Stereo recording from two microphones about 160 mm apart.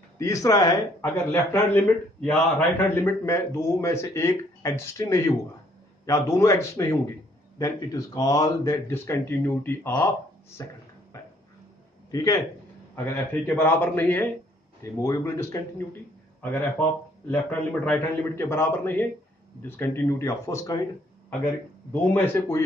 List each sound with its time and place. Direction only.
0.2 s speech: 20° left (ahead or behind)
11.1 s a sound: 20° left (ahead or behind)
12.1 s speech: 20° left (ahead or behind)
17.3 s speech: 10° left (ahead or behind)
22.1 s speech: 15° left (ahead or behind)